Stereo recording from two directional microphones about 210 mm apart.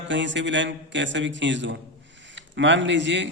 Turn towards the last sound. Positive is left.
turn(degrees=-60)  # may be behind; listen again after turning